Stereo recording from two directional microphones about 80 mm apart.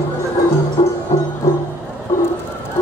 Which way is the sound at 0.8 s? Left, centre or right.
Left.